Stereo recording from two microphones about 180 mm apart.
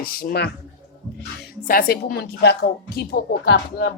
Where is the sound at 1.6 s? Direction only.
55° left (ahead or behind); by 3.9 s 70° left (ahead or behind).